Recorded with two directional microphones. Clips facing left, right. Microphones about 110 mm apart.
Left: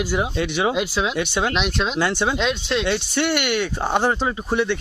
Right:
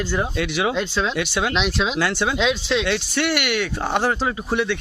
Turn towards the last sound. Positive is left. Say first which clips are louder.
# left 1 dB
turn(degrees=0)  # may be behind; listen again after turning